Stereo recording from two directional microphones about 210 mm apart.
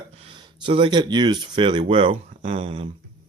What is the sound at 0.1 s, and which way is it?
Speech, 25° right (ahead or behind).